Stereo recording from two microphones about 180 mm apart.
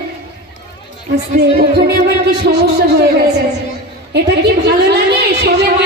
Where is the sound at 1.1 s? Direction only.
60° right (ahead or behind).